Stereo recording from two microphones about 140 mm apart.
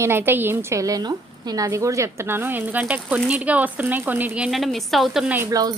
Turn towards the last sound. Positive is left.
turn(degrees=-25)  # may be behind; listen again after turning